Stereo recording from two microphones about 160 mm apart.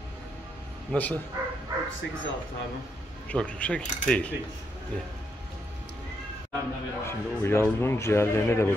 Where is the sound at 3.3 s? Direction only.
10° left (ahead or behind).